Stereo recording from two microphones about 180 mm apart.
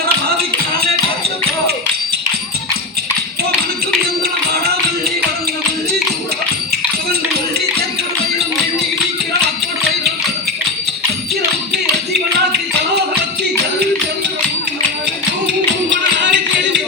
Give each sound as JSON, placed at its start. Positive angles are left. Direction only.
{"t": 15.9, "sound": "music", "side_deg": -75}